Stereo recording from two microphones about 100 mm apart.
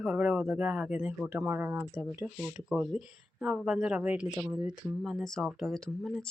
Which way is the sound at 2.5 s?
5° right (ahead or behind).